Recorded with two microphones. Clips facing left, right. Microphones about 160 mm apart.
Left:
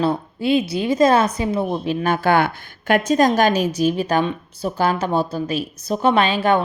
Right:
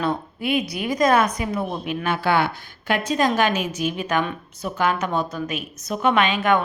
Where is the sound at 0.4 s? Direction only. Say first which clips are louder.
Left 5 dB; 30° left (ahead or behind).